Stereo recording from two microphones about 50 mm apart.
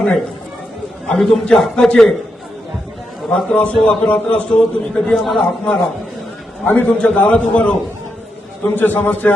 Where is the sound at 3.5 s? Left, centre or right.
Left.